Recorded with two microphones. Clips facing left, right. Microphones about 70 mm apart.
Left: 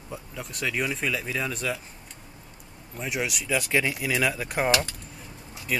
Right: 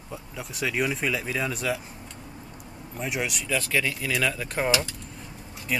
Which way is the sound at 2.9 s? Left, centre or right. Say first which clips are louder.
Even; centre.